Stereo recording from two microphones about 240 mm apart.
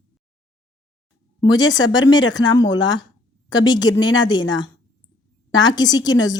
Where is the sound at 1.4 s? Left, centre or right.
Centre.